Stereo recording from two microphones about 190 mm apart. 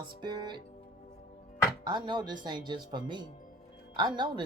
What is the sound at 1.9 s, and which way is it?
Speech, 25° right (ahead or behind).